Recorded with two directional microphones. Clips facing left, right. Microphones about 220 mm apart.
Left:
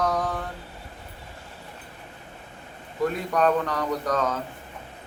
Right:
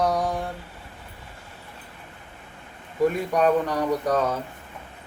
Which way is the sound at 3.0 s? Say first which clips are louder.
Right 2 dB; 10° right (ahead or behind).